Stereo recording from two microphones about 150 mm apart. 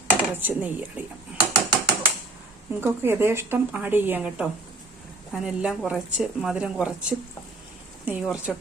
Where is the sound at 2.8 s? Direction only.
15° right (ahead or behind).